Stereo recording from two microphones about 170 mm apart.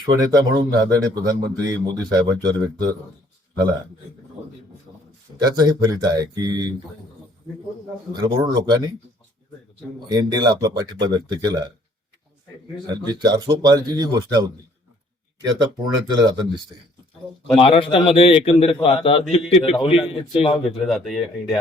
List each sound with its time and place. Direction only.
0.0 s speech: 20° right (ahead or behind)
5.4 s speech: 25° right (ahead or behind)
8.1 s speech: 25° right (ahead or behind)
10.1 s speech: 25° right (ahead or behind)
12.9 s speech: 25° right (ahead or behind)
17.6 s a man's voice: 35° left (ahead or behind)
20.7 s speech: centre (ahead or behind)